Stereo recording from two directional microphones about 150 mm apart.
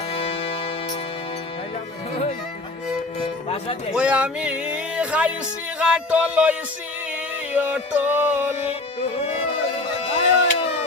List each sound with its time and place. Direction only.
0.1 s music: 40° left (ahead or behind)
3.9 s a sound: 10° right (ahead or behind)
5.8 s music: 5° right (ahead or behind)
8.5 s music: 45° left (ahead or behind)